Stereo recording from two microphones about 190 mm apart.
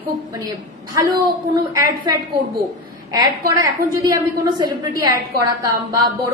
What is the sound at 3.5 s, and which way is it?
A woman's voice, 15° right (ahead or behind).